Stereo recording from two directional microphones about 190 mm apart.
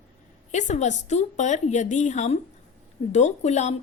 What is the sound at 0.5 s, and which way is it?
Speech, 40° left (ahead or behind).